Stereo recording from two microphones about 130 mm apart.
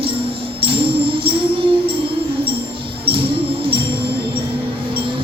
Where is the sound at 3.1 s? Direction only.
45° right (ahead or behind).